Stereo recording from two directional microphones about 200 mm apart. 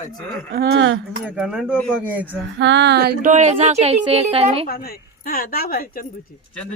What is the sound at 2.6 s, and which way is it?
Female singing, 60° right (ahead or behind).